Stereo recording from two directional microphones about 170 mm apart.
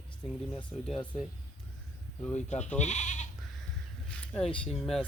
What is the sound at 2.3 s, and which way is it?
Speech, 45° left (ahead or behind).